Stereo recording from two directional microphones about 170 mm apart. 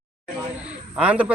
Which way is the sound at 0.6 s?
5° right (ahead or behind).